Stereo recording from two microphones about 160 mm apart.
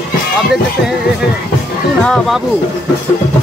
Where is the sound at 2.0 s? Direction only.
5° left (ahead or behind).